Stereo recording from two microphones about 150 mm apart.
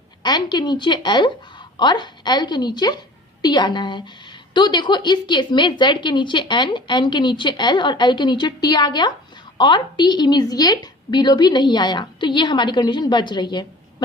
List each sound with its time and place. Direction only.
0.2 s a woman's voice: 30° left (ahead or behind)